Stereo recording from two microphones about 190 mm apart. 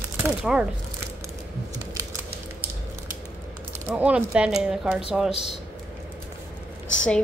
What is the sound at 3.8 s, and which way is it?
Speech, 5° right (ahead or behind).